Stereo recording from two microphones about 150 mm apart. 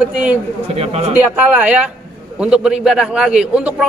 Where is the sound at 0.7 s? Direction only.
40° right (ahead or behind).